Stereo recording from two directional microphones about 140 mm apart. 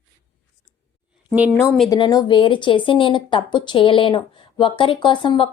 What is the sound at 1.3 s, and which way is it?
Speech, 10° right (ahead or behind).